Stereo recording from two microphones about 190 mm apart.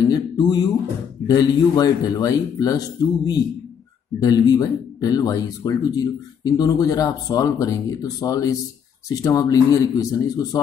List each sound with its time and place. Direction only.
0.1 s speech: 20° left (ahead or behind)